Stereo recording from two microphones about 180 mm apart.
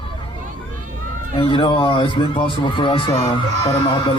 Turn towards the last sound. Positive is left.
turn(degrees=25)  # may be behind; listen again after turning